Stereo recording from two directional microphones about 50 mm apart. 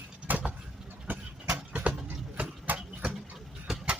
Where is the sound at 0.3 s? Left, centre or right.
Right.